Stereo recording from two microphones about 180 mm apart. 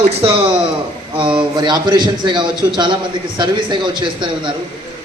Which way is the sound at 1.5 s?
25° right (ahead or behind).